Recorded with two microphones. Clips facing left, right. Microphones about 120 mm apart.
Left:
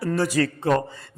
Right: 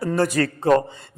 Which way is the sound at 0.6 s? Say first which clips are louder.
Right 8 dB; 30° right (ahead or behind).